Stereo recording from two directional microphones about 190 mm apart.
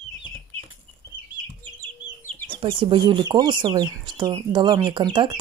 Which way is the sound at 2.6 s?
25° right (ahead or behind).